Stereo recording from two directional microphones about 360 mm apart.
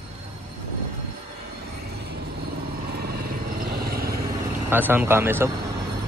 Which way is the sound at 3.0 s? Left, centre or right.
Right.